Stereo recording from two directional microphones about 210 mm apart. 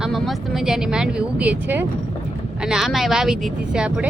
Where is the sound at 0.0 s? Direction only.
Centre (ahead or behind).